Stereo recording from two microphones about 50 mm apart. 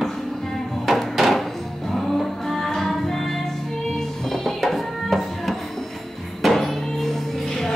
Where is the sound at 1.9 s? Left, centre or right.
Centre.